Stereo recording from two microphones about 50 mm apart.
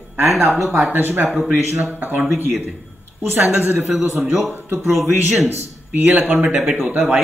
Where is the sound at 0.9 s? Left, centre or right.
Right.